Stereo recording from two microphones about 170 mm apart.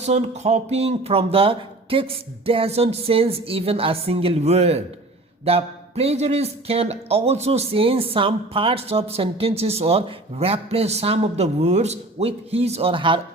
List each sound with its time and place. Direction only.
0.0 s speech: 40° right (ahead or behind)